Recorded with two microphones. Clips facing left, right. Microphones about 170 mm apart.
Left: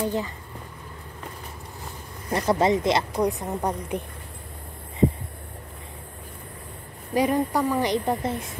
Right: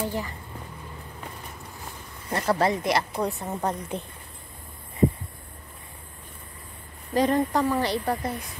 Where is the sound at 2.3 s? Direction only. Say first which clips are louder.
Left 3 dB; 20° left (ahead or behind).